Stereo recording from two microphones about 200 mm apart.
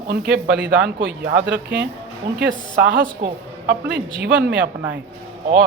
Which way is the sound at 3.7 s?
60° right (ahead or behind).